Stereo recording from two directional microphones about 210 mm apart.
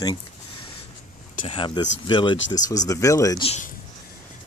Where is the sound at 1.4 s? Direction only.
25° left (ahead or behind).